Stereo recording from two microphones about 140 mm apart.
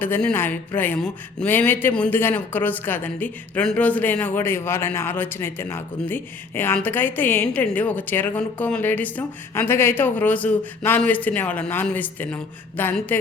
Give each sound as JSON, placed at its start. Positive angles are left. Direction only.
{"t": 0.0, "sound": "a woman's voice", "side_deg": 10}